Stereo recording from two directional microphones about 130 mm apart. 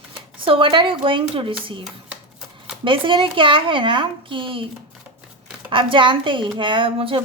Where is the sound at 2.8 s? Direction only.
40° right (ahead or behind).